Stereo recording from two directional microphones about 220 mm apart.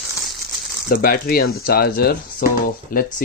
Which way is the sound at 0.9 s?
40° left (ahead or behind).